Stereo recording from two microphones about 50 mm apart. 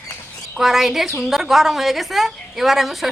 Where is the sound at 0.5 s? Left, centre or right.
Centre.